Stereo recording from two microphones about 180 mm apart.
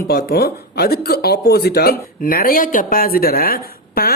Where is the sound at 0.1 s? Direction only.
60° left (ahead or behind).